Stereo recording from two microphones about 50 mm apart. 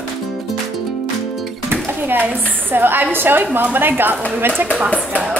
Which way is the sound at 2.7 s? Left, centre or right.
Right.